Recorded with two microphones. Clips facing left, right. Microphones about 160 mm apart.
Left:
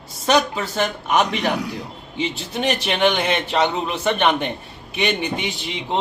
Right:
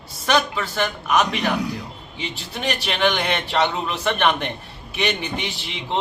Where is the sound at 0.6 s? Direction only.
20° left (ahead or behind).